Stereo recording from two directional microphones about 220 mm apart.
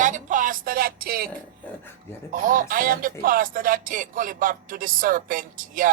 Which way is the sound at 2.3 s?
35° right (ahead or behind).